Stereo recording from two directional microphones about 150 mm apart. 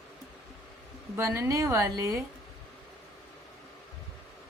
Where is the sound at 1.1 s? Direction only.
20° right (ahead or behind).